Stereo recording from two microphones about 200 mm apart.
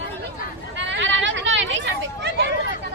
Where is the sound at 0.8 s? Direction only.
65° right (ahead or behind).